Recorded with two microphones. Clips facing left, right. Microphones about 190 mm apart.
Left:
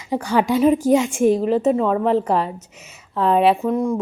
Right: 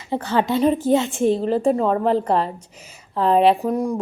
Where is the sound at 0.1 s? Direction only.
10° left (ahead or behind).